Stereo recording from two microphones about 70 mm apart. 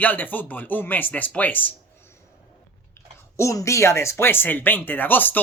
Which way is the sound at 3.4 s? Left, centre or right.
Left.